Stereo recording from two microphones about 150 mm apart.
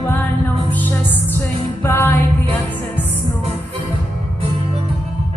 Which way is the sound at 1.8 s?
15° left (ahead or behind).